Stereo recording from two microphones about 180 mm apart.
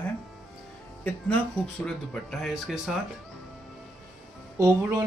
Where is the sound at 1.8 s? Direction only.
5° left (ahead or behind).